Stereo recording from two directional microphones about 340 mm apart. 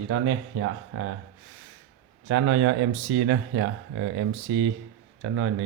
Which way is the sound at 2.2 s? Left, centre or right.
Right.